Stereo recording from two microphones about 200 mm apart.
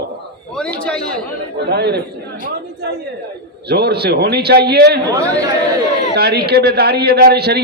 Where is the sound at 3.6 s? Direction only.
55° right (ahead or behind).